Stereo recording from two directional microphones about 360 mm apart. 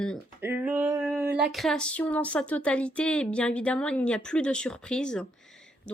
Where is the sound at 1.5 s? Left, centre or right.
Centre.